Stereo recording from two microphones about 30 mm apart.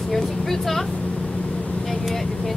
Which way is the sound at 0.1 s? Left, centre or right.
Centre.